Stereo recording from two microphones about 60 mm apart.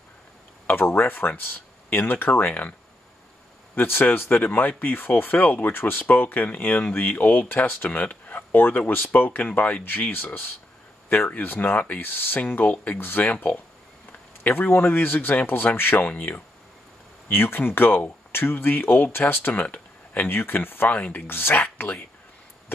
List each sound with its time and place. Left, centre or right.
0.7 s speech: left
3.7 s speech: left
10.1 s speech: left
17.3 s speech: left
19.6 s a sound: left
20.2 s speech: left
20.9 s speech: left
21.3 s speech: left